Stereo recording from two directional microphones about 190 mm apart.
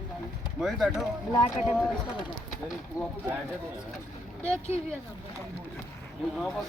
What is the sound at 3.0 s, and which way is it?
Speech, 15° left (ahead or behind).